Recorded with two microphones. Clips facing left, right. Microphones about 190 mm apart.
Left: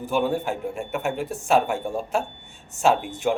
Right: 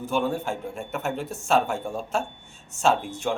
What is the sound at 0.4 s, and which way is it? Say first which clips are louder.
Speech: left 3 dB; 15° left (ahead or behind).